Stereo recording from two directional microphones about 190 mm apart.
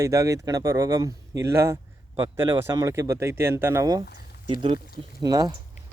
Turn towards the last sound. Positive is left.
turn(degrees=-20)  # may be behind; listen again after turning